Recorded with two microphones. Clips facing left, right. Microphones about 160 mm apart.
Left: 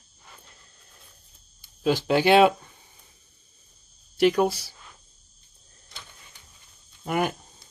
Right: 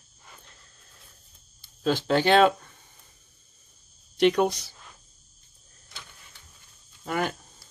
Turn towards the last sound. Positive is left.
turn(degrees=15)  # may be behind; listen again after turning